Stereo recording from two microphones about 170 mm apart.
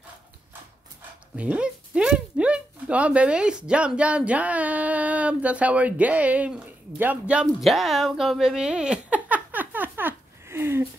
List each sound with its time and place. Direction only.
1.3 s speech: 5° right (ahead or behind)